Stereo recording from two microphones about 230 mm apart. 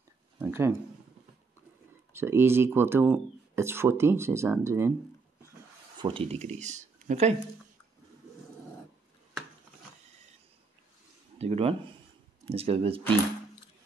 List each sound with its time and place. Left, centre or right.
0.4 s speech: centre
2.1 s speech: centre
5.9 s speech: right
11.3 s speech: right